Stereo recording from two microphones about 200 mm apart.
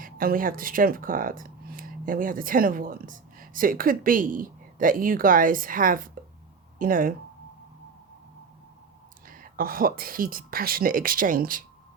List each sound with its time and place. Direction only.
0.0 s speech: 45° right (ahead or behind)
9.2 s speech: 45° right (ahead or behind)